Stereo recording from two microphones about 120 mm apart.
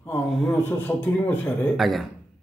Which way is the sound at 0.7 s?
15° left (ahead or behind).